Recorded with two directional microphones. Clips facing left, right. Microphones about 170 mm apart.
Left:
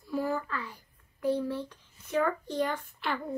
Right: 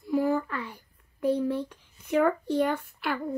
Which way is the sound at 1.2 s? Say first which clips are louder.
Right 4 dB; 15° right (ahead or behind).